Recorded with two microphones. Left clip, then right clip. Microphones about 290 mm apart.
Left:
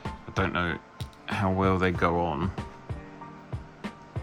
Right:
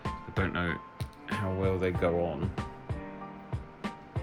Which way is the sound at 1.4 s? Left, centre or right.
Left.